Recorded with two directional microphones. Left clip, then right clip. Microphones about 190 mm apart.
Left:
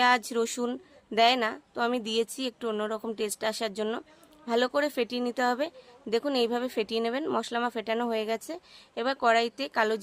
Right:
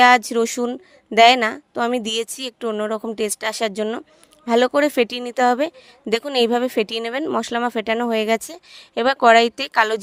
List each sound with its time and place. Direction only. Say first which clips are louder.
0.0 s speech: right 11 dB; 35° right (ahead or behind)